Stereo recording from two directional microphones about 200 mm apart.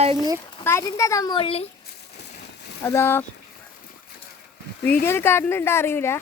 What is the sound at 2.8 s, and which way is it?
Speech, 10° left (ahead or behind).